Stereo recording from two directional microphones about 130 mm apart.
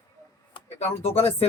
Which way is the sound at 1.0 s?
50° left (ahead or behind).